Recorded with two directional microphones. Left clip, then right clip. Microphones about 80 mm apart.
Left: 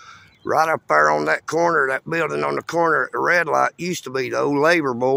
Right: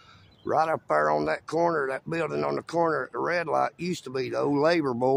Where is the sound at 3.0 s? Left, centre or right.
Left.